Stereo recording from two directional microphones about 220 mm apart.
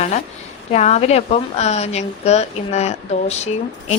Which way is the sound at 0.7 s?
30° left (ahead or behind).